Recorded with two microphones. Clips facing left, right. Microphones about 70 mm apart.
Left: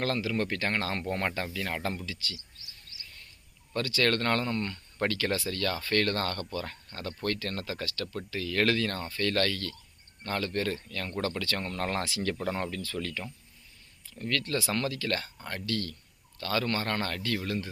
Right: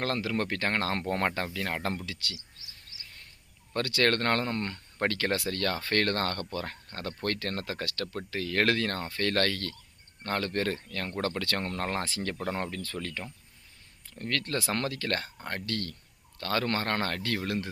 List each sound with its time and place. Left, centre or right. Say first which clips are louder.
0.0 s speech: even; right
0.9 s speech: right 2 dB; right
2.0 s speech: even; right
3.8 s speech: right 1 dB; right
4.9 s speech: right 1 dB; right
14.1 s speech: left 1 dB; right